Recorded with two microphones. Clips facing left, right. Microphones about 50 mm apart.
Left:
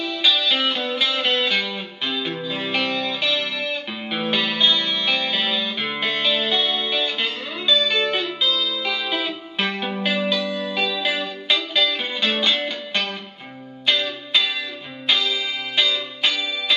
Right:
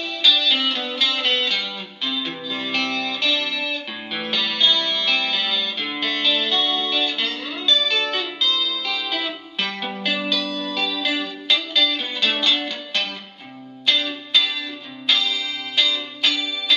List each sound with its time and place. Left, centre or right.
0.0 s music: centre